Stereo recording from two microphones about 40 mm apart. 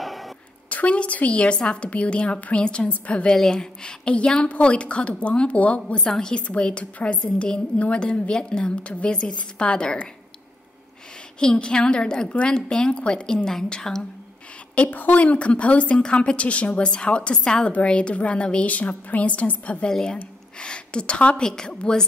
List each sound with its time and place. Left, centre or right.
0.0 s a sound: centre
0.7 s a woman's voice: left
3.3 s a woman's voice: centre; by 5.8 s left
6.0 s a woman's voice: centre
6.3 s a woman's voice: left
11.3 s a woman's voice: left
14.9 s a woman's voice: left
18.8 s speech: left
19.9 s a woman's voice: centre
21.4 s a woman's voice: centre